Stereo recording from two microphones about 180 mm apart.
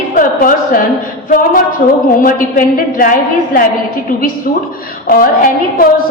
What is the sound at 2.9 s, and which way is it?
Speech, 50° left (ahead or behind).